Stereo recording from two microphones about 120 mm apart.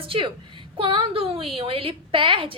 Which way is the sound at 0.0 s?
45° right (ahead or behind).